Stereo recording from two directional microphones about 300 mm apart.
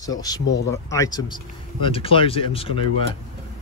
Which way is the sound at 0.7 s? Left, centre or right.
Centre.